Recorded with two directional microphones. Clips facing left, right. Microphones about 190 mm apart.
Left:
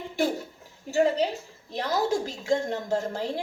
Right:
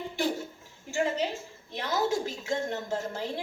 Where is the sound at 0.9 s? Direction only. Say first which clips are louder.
Left 6 dB; 35° left (ahead or behind).